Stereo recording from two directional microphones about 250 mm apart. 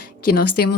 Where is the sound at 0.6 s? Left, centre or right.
Left.